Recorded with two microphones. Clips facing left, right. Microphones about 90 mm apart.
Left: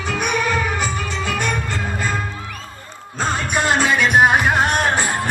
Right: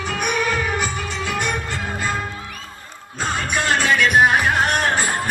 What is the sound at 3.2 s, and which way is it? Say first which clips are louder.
Music: left 2 dB; 30° left (ahead or behind).